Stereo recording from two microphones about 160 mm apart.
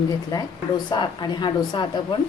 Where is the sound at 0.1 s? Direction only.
25° left (ahead or behind).